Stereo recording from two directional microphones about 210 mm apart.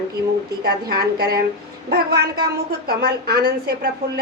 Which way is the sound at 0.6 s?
45° right (ahead or behind).